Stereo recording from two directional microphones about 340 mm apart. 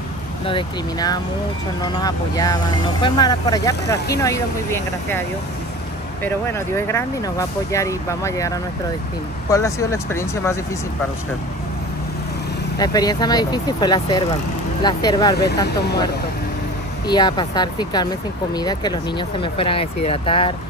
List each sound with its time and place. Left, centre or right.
0.5 s speech: centre
6.9 s speech: centre
12.7 s speech: centre
15.3 s speech: left
17.1 s speech: centre